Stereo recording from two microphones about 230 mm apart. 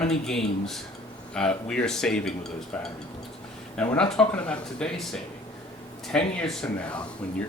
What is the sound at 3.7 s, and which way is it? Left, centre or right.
Speech, centre.